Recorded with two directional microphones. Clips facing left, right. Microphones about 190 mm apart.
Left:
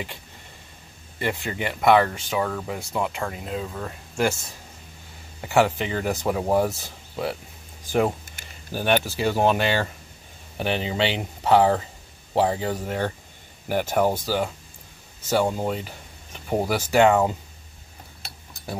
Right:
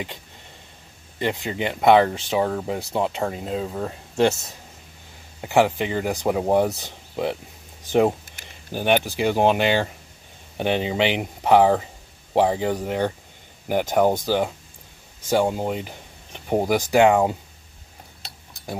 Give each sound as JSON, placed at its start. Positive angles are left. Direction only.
{"t": 1.2, "sound": "speech", "side_deg": -20}
{"t": 5.4, "sound": "speech", "side_deg": -15}
{"t": 8.7, "sound": "speech", "side_deg": -15}